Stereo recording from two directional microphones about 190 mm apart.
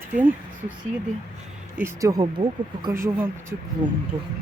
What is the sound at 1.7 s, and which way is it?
Speech, 15° right (ahead or behind).